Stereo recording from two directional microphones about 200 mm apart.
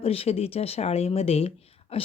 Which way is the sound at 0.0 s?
30° left (ahead or behind).